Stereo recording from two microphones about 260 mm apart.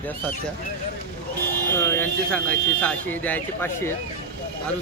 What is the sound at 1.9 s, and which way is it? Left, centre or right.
Speech, centre.